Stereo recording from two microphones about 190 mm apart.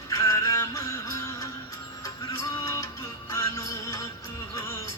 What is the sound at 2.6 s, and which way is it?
Music, 15° left (ahead or behind).